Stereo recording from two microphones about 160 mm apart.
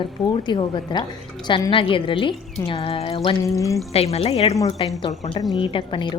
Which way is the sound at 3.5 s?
20° left (ahead or behind).